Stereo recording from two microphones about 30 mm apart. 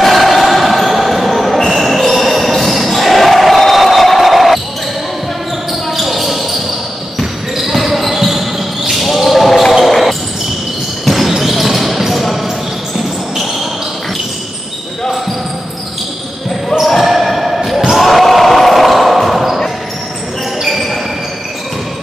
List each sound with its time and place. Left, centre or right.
0.0 s basketball bounce: centre
5.7 s basketball bounce: centre
16.8 s basketball bounce: centre
20.6 s basketball bounce: centre